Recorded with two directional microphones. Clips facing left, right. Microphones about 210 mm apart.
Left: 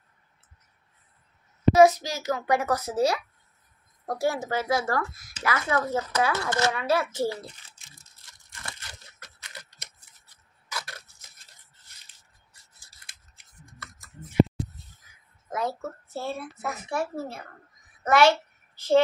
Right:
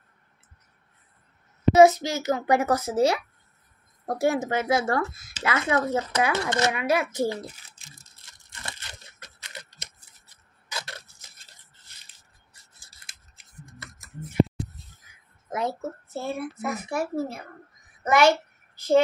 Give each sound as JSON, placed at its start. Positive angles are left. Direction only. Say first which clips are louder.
{"t": 1.8, "sound": "speech", "louder": "right 2 dB", "side_deg": -25}
{"t": 8.5, "sound": "tearing", "louder": "right 2 dB", "side_deg": -25}
{"t": 10.7, "sound": "a sound", "louder": "right 1 dB", "side_deg": -25}
{"t": 15.5, "sound": "a child's voice", "louder": "right 1 dB", "side_deg": -20}